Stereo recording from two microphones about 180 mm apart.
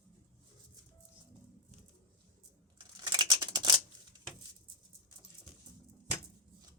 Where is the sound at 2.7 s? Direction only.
25° right (ahead or behind).